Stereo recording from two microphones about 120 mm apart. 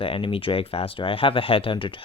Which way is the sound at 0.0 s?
50° left (ahead or behind).